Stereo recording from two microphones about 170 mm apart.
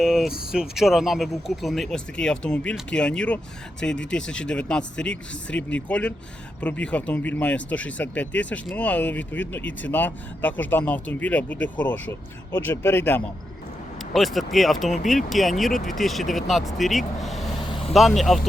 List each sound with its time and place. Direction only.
0.0 s speech: 5° right (ahead or behind); by 13.2 s 10° left (ahead or behind)
14.1 s speech: centre (ahead or behind)